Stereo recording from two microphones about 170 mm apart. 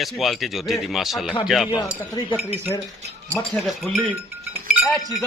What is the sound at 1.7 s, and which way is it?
Speech, 15° left (ahead or behind).